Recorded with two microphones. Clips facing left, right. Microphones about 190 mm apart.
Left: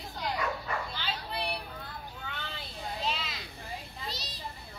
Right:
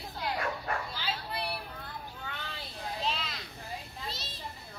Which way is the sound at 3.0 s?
Centre (ahead or behind).